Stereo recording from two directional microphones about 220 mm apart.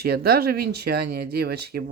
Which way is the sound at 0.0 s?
45° right (ahead or behind).